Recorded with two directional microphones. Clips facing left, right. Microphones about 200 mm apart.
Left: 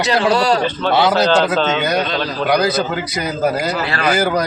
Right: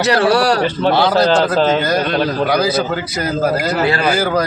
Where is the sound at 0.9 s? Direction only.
Centre (ahead or behind).